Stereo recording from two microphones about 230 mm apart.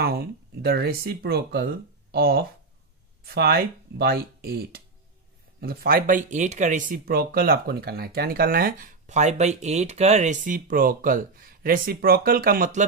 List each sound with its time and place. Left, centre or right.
0.0 s speech: right